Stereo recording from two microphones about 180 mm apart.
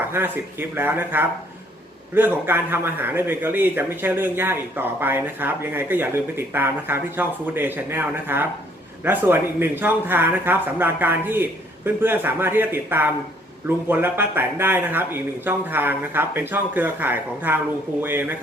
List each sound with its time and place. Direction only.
0.8 s speech: 10° right (ahead or behind)